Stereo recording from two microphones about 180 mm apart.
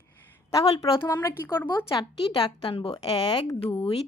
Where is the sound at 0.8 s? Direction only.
20° left (ahead or behind).